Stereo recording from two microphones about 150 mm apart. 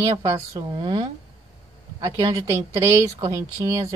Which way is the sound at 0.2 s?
25° right (ahead or behind).